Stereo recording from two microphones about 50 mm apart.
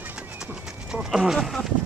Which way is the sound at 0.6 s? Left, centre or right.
Centre.